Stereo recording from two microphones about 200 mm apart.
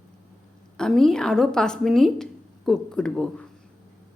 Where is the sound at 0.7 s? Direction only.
Centre (ahead or behind).